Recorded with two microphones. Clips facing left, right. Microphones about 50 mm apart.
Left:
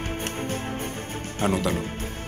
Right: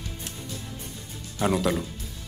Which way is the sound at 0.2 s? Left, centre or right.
Left.